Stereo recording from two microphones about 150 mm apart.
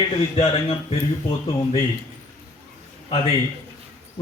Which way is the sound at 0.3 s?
40° left (ahead or behind).